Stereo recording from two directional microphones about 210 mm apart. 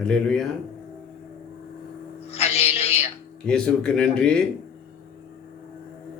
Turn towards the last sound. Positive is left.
turn(degrees=5)  # may be behind; listen again after turning